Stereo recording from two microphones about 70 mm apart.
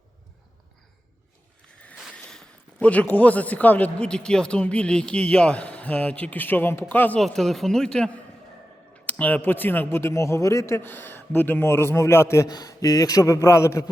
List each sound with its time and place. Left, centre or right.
2.1 s a man's voice: centre
4.1 s speech: centre; by 7.2 s left
7.2 s speech: centre
9.0 s a man's voice: left
10.8 s a man's voice: left
12.5 s a man's voice: left